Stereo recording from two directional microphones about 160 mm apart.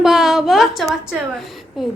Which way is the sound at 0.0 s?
Centre (ahead or behind).